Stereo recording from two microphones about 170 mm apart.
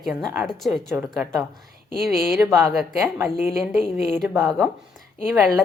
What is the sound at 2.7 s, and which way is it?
A woman's voice, centre (ahead or behind).